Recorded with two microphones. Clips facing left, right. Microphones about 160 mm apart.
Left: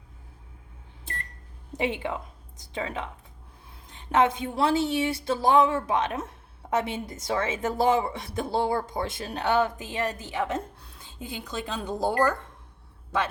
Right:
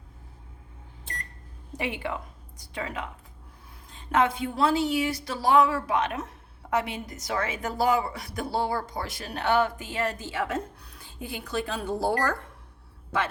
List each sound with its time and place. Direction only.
1.7 s a woman's voice: 20° left (ahead or behind)